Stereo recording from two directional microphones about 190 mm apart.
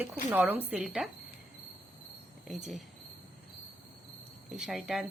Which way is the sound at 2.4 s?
Centre (ahead or behind).